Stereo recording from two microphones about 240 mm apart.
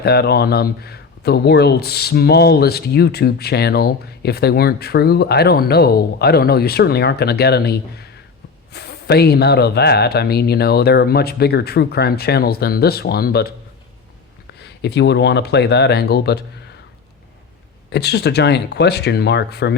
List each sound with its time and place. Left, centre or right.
0.0 s speech: left
14.6 s speech: left
17.9 s speech: left